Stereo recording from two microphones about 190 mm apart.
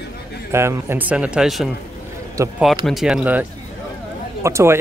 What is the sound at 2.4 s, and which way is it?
Speech, 15° right (ahead or behind).